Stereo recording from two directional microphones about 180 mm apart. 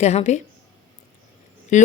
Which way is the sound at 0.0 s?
40° left (ahead or behind).